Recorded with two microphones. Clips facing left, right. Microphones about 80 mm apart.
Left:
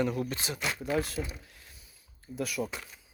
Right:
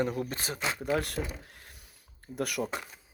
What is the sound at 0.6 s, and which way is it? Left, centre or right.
Speech, right.